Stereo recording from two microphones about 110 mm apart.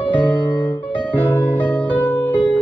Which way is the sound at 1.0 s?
15° left (ahead or behind).